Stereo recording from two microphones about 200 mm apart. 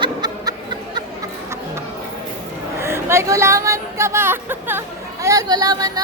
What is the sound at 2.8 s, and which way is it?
A woman's voice, 15° right (ahead or behind).